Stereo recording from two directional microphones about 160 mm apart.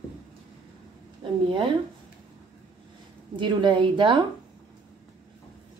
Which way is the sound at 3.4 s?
30° right (ahead or behind).